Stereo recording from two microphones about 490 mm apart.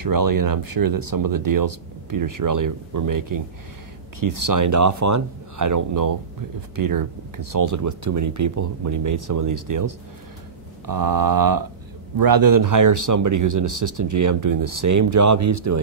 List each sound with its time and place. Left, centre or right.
0.0 s speech: right